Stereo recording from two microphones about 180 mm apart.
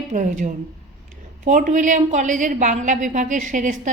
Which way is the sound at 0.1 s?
45° right (ahead or behind).